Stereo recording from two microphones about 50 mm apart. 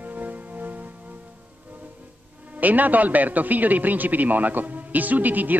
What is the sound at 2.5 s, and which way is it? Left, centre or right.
Speech, right.